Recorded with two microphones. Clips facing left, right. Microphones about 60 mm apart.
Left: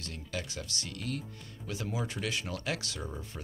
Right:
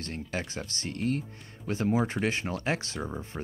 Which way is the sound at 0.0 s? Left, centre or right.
Right.